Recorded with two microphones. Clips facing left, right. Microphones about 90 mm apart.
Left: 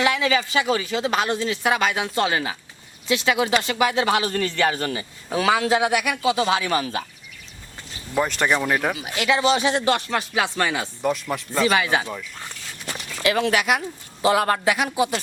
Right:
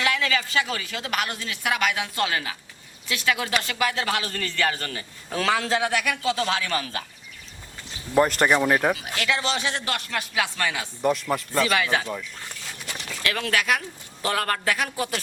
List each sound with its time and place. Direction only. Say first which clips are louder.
0.0 s speech: left 4 dB; 20° left (ahead or behind)
8.1 s speech: right 2 dB; 5° right (ahead or behind)
9.0 s speech: left 5 dB; 20° left (ahead or behind)
11.0 s speech: right 2 dB; centre (ahead or behind)
11.6 s speech: left 5 dB; 25° left (ahead or behind)
13.2 s speech: left 5 dB; 20° left (ahead or behind)